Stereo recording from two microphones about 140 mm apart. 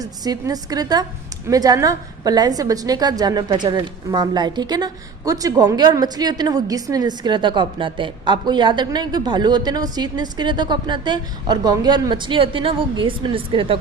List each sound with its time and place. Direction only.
0.0 s a woman's voice: 25° right (ahead or behind)